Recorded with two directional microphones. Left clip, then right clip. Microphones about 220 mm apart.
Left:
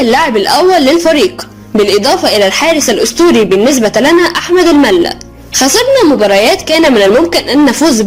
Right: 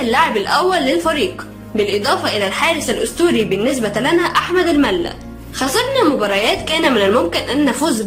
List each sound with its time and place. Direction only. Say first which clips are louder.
0.0 s a woman's voice: left 6 dB; 30° left (ahead or behind)